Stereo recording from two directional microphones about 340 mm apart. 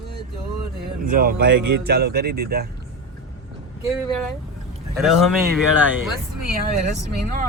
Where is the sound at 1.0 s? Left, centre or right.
Right.